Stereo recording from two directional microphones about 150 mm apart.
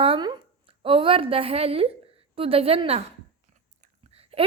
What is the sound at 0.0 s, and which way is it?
A woman's voice, 35° right (ahead or behind).